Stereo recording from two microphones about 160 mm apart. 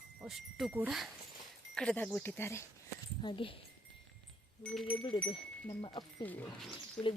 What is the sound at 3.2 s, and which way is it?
Speech, 35° left (ahead or behind).